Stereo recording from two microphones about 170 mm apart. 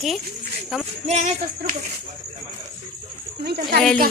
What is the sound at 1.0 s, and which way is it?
Jingle bell, 40° right (ahead or behind).